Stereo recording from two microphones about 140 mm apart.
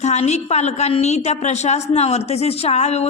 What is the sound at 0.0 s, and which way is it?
A woman's voice, 55° left (ahead or behind).